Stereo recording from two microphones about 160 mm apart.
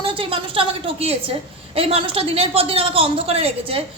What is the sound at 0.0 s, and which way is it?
A woman's voice, 35° right (ahead or behind).